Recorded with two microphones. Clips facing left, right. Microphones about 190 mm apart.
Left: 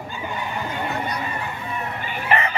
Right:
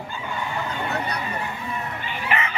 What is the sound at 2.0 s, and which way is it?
Chicken, 35° left (ahead or behind).